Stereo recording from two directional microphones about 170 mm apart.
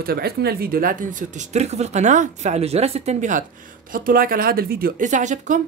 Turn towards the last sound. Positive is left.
turn(degrees=-45)  # may be behind; listen again after turning